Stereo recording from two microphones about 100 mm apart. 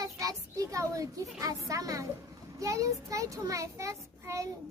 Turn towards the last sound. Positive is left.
turn(degrees=-30)  # may be behind; listen again after turning